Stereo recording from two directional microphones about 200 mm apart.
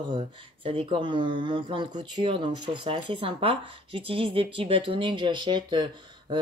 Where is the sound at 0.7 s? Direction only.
25° right (ahead or behind).